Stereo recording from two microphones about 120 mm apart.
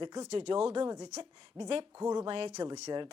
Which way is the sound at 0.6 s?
45° right (ahead or behind).